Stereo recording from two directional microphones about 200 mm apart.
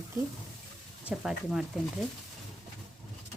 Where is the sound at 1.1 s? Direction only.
5° right (ahead or behind).